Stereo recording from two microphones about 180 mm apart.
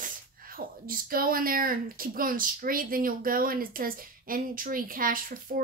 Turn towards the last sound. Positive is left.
turn(degrees=-50)  # may be behind; listen again after turning